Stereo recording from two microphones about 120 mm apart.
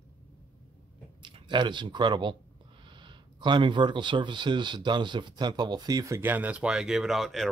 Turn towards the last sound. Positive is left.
turn(degrees=0)  # may be behind; listen again after turning